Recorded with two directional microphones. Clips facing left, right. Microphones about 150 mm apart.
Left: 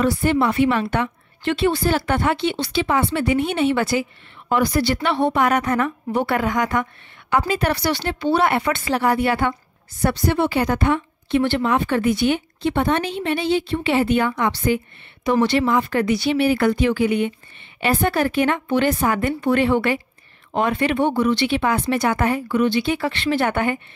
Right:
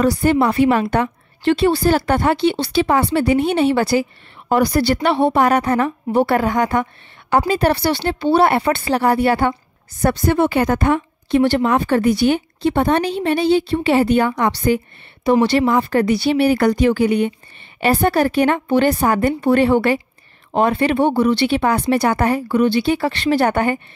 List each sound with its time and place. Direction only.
0.0 s a woman's voice: 40° right (ahead or behind)
10.0 s a woman's voice: 45° right (ahead or behind)